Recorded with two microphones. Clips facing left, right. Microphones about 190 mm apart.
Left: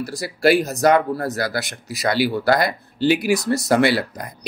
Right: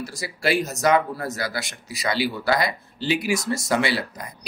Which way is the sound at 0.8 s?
55° left (ahead or behind).